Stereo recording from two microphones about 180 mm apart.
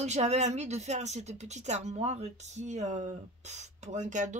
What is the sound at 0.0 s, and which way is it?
Speech, 40° right (ahead or behind).